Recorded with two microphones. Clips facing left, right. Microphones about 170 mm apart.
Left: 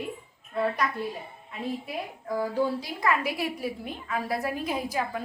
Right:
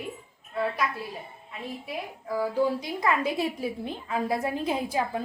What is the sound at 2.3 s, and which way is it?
Speech, 10° right (ahead or behind).